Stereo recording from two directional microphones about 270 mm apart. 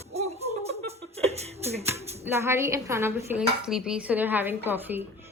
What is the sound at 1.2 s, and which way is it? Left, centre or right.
Music, right.